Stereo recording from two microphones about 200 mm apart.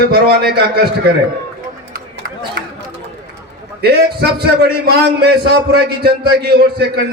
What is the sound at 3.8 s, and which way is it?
A man's voice, 50° right (ahead or behind).